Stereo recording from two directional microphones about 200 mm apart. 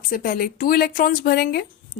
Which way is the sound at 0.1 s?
45° left (ahead or behind).